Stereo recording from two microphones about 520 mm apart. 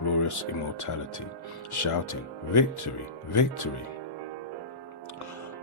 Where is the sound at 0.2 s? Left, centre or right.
Left.